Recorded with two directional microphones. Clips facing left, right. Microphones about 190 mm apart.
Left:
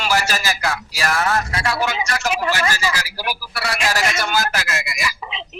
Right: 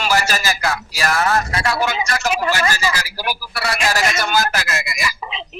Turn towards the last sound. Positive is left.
turn(degrees=-45)  # may be behind; listen again after turning